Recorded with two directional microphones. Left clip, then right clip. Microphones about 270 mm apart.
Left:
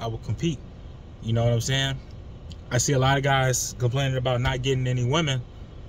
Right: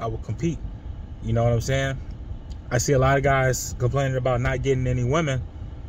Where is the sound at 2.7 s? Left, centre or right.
Centre.